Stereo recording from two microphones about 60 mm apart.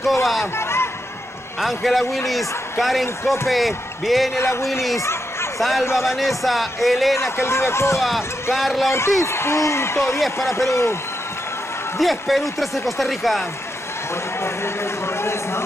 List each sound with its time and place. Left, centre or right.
0.0 s speech: centre
0.6 s a sound: left
1.6 s speech: centre
4.4 s speech: left
5.6 s speech: centre
7.2 s speech: left
8.5 s speech: centre
9.2 s speech: left
12.0 s speech: centre
14.4 s a sound: left